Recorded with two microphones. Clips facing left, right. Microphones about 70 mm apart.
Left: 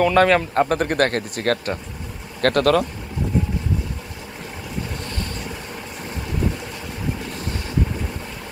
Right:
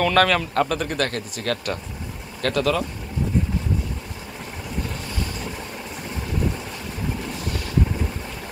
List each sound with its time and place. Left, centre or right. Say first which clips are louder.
0.0 s a man's voice: left 2 dB; centre
0.3 s speech: left 4 dB; left